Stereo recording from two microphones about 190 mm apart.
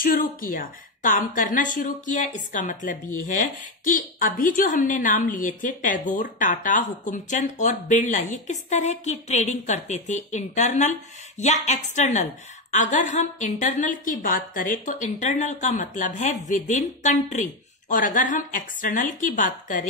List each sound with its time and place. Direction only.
0.0 s a woman's voice: 50° left (ahead or behind)